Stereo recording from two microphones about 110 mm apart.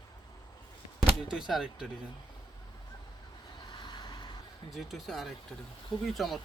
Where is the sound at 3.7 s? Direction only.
45° left (ahead or behind).